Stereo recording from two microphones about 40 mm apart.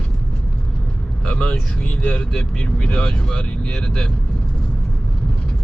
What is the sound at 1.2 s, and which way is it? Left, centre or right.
Speech, left.